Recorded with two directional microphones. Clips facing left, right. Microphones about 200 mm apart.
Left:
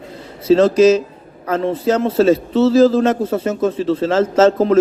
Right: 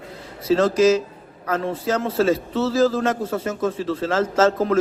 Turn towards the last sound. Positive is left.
turn(degrees=25)  # may be behind; listen again after turning